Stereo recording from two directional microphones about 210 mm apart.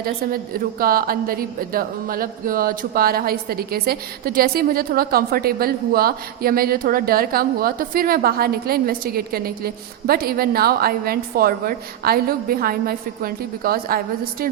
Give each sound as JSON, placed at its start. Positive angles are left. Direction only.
{"t": 0.8, "sound": "speech", "side_deg": -45}